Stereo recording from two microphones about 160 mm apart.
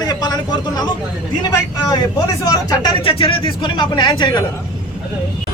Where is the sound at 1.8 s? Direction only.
25° left (ahead or behind).